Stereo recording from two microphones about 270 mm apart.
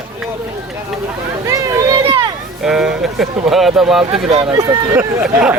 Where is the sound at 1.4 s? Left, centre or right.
Centre.